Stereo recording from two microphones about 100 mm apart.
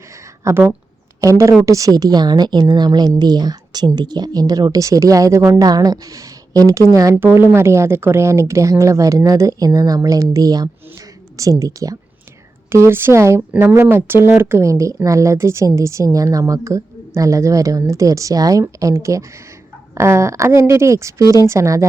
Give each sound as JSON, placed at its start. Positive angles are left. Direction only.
{"t": 0.4, "sound": "a woman's voice", "side_deg": -25}
{"t": 12.7, "sound": "speech", "side_deg": -25}